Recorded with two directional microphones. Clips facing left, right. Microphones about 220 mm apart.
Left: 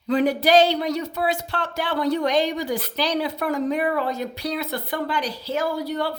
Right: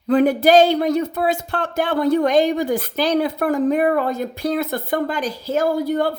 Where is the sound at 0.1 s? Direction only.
50° right (ahead or behind).